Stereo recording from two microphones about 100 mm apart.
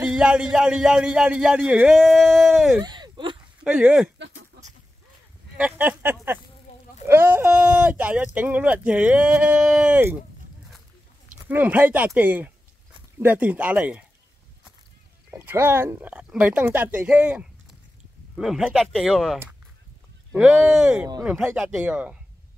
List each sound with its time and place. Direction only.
0.0 s a man's voice: 10° right (ahead or behind)
2.8 s a sound: 45° right (ahead or behind)
3.6 s speech: 10° right (ahead or behind)
5.6 s speech: 20° right (ahead or behind)
11.4 s speech: 15° right (ahead or behind)
15.3 s speech: 25° right (ahead or behind)
18.3 s speech: centre (ahead or behind)
20.3 s speech: 20° right (ahead or behind)
21.5 s speech: 5° right (ahead or behind)